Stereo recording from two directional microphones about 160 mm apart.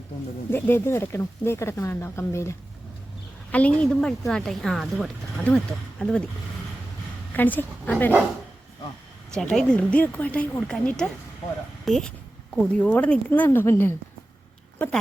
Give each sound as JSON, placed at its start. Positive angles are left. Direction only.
{"t": 0.5, "sound": "a woman's voice", "side_deg": 15}
{"t": 7.3, "sound": "speech", "side_deg": 10}
{"t": 9.3, "sound": "a woman's voice", "side_deg": 5}